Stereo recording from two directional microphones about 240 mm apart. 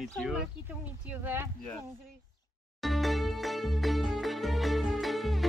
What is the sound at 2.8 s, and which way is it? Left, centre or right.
Music, centre.